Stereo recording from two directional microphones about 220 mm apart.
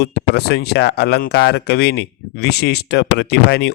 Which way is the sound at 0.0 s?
45° left (ahead or behind).